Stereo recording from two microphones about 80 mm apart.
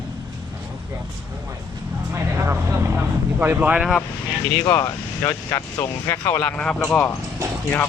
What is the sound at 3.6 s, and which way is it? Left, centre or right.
Speech, centre.